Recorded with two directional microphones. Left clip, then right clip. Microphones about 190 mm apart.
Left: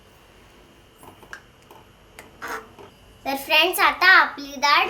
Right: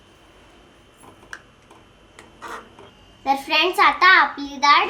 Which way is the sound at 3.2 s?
Centre (ahead or behind).